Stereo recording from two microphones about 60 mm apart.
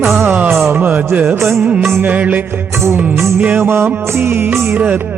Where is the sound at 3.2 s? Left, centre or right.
Right.